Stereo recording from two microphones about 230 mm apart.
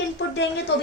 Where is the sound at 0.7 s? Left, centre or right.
Left.